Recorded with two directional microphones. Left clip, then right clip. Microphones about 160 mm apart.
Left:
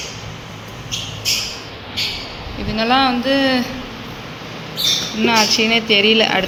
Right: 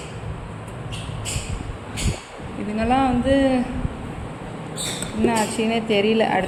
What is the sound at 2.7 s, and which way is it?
Speech, centre (ahead or behind).